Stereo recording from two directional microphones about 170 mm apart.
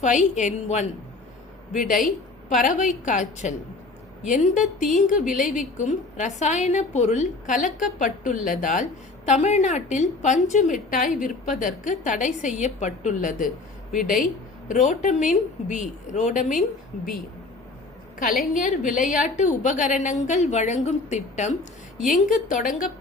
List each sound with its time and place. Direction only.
0.0 s a woman's voice: 45° left (ahead or behind)
18.5 s a woman's voice: 50° left (ahead or behind)